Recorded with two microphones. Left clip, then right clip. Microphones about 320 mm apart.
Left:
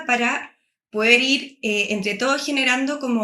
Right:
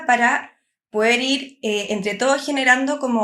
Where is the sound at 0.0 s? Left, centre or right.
Right.